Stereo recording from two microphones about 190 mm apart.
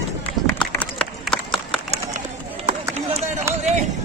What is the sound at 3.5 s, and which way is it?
Run, 15° right (ahead or behind).